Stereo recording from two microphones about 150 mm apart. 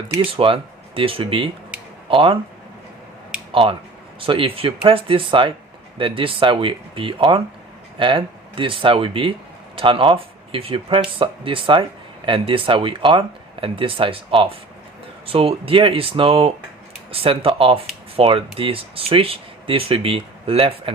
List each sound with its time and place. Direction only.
0.2 s speech: 35° right (ahead or behind)
3.5 s speech: 35° right (ahead or behind)